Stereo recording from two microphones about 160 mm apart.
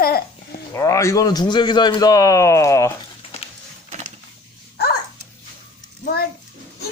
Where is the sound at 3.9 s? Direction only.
45° right (ahead or behind).